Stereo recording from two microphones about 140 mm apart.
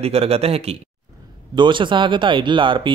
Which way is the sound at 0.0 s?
45° right (ahead or behind).